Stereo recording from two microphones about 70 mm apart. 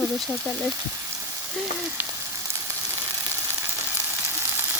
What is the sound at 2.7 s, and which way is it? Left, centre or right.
Frying, right.